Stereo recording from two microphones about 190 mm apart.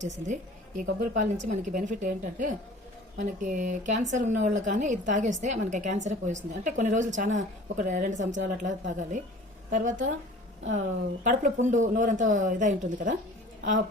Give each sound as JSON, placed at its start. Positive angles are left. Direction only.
{"t": 0.8, "sound": "a woman's voice", "side_deg": -40}